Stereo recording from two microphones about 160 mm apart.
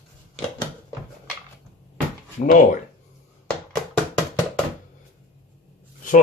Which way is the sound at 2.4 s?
55° left (ahead or behind).